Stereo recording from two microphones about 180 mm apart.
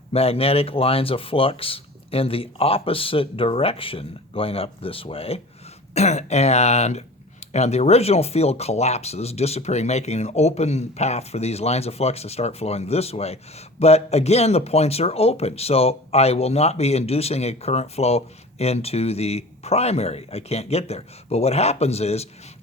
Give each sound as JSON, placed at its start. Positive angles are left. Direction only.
{"t": 0.1, "sound": "speech", "side_deg": 35}